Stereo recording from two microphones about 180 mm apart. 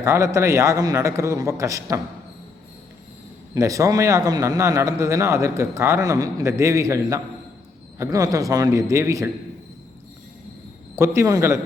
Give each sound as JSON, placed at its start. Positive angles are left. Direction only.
{"t": 0.0, "sound": "a man's voice", "side_deg": -15}
{"t": 3.5, "sound": "a man's voice", "side_deg": -20}
{"t": 10.9, "sound": "a man's voice", "side_deg": -15}